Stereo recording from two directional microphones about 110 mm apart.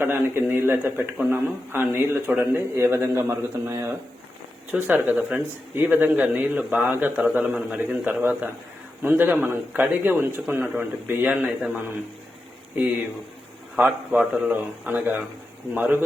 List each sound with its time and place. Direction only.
0.0 s a man's voice: 20° right (ahead or behind)
13.7 s a man's voice: 10° right (ahead or behind)